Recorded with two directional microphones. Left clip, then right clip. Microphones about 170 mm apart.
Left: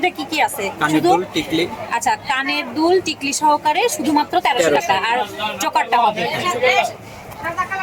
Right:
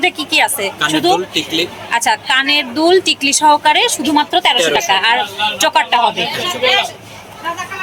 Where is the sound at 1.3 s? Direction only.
55° left (ahead or behind).